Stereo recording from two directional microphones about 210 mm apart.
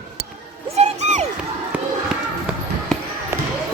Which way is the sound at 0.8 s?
35° right (ahead or behind).